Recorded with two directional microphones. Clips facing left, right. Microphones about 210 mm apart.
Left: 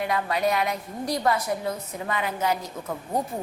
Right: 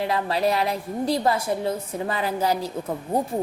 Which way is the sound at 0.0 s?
30° right (ahead or behind).